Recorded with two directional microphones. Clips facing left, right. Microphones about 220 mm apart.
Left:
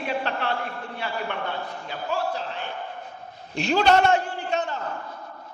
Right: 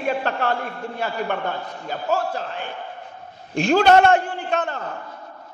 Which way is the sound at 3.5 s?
50° right (ahead or behind).